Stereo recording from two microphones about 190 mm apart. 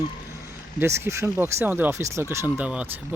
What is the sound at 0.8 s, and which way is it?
Speech, 15° right (ahead or behind).